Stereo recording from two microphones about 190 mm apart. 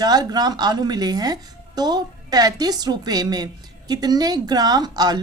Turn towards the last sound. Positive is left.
turn(degrees=-20)  # may be behind; listen again after turning